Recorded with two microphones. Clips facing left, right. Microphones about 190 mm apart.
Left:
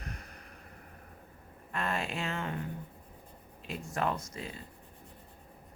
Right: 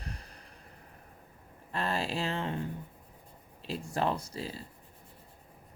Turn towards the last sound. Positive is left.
turn(degrees=-30)  # may be behind; listen again after turning